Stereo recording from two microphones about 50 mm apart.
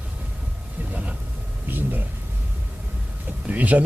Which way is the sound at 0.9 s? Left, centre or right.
Right.